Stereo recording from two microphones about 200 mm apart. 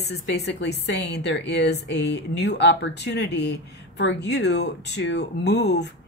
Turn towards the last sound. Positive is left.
turn(degrees=60)  # may be behind; listen again after turning